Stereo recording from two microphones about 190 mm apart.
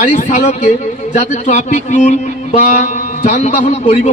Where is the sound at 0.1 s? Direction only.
40° left (ahead or behind).